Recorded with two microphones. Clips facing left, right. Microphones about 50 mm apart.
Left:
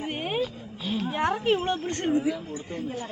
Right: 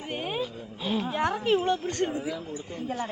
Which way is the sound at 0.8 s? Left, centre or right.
Centre.